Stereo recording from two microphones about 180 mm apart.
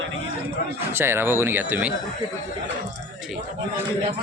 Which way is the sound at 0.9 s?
15° right (ahead or behind).